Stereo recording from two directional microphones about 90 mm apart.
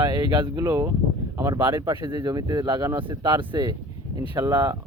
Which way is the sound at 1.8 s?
50° right (ahead or behind).